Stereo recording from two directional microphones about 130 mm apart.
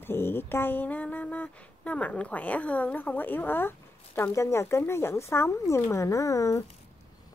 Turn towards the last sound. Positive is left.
turn(degrees=25)  # may be behind; listen again after turning